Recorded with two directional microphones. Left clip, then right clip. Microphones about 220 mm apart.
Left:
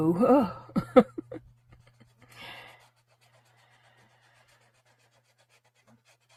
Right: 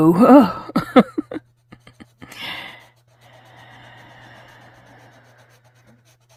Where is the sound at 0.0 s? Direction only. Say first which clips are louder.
Right 12 dB; 50° right (ahead or behind).